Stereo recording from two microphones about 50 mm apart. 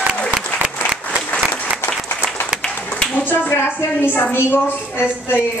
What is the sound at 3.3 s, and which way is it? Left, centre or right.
A woman's voice, left.